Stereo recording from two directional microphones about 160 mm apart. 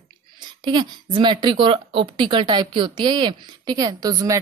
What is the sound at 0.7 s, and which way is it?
A woman's voice, 30° right (ahead or behind).